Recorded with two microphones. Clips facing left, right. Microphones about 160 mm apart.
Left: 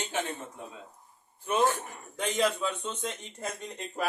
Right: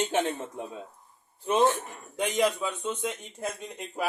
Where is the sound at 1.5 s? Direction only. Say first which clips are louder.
Right 3 dB; 25° right (ahead or behind).